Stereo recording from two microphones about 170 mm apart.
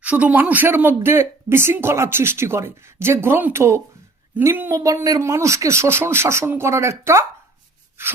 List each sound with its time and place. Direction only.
0.0 s speech: 10° right (ahead or behind)